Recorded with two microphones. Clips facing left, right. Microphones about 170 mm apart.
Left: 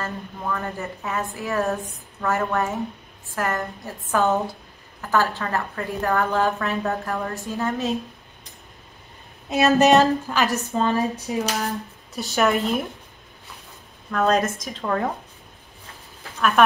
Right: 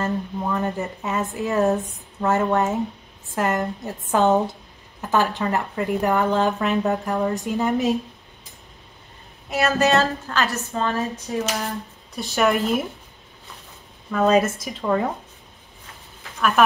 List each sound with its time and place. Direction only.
0.0 s a woman's voice: 20° right (ahead or behind)
9.5 s a woman's voice: 20° left (ahead or behind)
12.2 s speech: centre (ahead or behind)
14.1 s speech: 5° right (ahead or behind)
16.3 s speech: centre (ahead or behind)